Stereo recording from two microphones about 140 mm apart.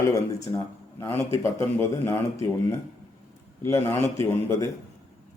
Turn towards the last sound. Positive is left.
turn(degrees=20)  # may be behind; listen again after turning